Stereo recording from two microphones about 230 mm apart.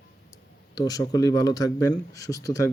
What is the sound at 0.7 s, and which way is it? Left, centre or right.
Speech, centre.